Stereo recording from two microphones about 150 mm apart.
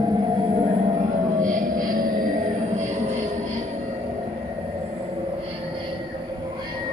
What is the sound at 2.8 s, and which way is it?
Music, 50° right (ahead or behind).